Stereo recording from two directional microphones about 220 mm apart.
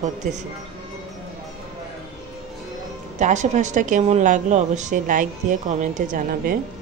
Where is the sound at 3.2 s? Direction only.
35° right (ahead or behind).